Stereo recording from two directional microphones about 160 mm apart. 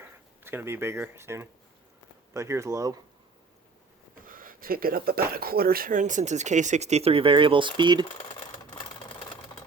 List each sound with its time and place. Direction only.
0.4 s speech: 15° right (ahead or behind)
4.3 s speech: 60° right (ahead or behind); by 8.0 s 30° right (ahead or behind)
8.0 s sewing machine: 30° left (ahead or behind)